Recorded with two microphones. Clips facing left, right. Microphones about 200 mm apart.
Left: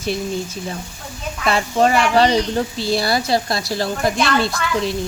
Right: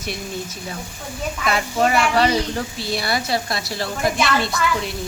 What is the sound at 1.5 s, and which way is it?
A child's voice, 30° left (ahead or behind).